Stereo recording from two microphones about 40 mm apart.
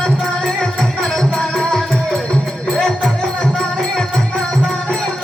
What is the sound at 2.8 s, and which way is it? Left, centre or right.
Music, centre.